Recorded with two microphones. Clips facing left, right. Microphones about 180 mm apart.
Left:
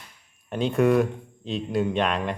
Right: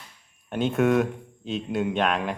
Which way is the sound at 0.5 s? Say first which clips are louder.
Left 1 dB; centre (ahead or behind).